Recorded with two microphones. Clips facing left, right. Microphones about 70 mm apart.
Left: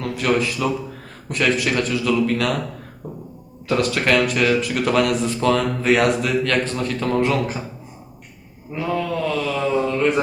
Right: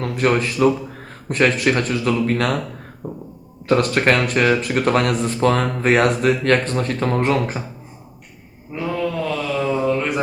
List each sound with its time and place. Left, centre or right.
0.2 s speech: right
3.7 s speech: right
8.7 s mantra: centre